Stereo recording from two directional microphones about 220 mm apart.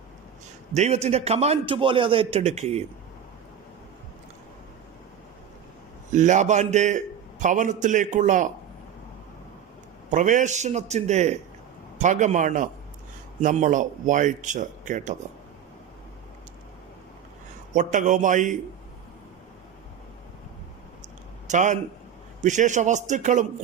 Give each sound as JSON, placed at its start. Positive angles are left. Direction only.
{"t": 0.7, "sound": "a man's voice", "side_deg": -30}
{"t": 6.1, "sound": "a man's voice", "side_deg": -35}
{"t": 10.1, "sound": "a man's voice", "side_deg": -35}
{"t": 17.7, "sound": "a man's voice", "side_deg": -35}
{"t": 21.4, "sound": "a man's voice", "side_deg": -35}